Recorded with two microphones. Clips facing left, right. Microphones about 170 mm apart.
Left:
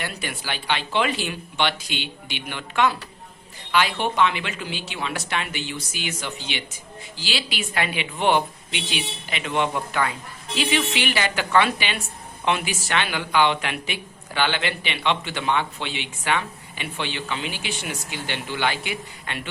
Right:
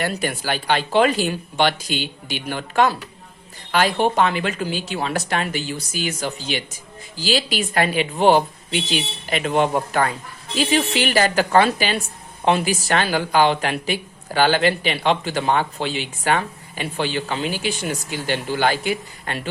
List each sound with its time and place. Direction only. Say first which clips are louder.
0.0 s speech: right 8 dB; 45° right (ahead or behind)